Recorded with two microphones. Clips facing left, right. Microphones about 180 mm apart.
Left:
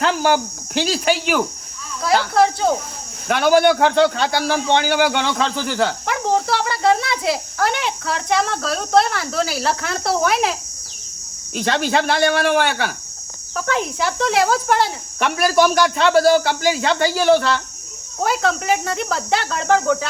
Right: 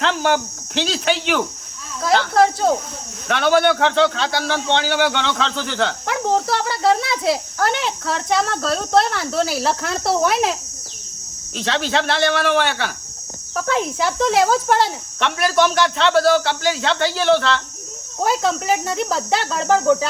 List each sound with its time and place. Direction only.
0.0 s a man's voice: 5° left (ahead or behind)
11.6 s speech: 5° left (ahead or behind)
12.0 s speech: 50° left (ahead or behind)
12.5 s a man's voice: 10° left (ahead or behind)